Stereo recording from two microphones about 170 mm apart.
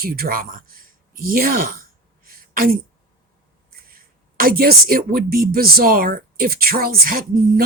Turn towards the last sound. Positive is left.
turn(degrees=-60)  # may be behind; listen again after turning